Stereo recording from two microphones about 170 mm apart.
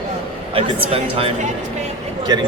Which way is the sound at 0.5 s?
35° right (ahead or behind).